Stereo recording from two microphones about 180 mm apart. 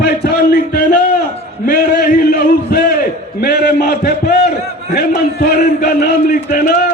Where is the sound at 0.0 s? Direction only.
60° left (ahead or behind).